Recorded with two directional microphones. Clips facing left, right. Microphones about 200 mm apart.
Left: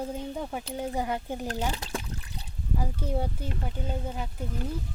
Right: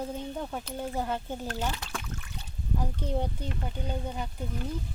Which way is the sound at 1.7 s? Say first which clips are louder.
Left 3 dB; 35° left (ahead or behind).